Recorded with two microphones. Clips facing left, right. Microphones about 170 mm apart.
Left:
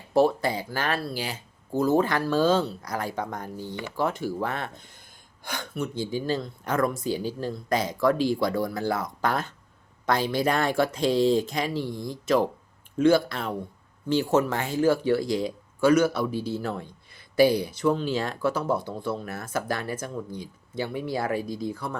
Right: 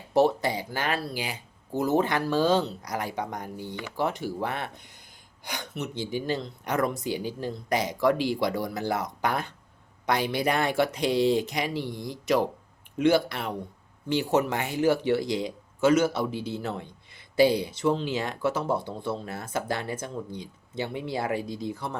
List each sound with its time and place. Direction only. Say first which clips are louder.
0.1 s speech: left 1 dB; 20° right (ahead or behind)